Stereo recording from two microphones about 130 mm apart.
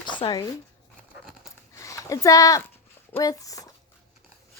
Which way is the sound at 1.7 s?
25° left (ahead or behind).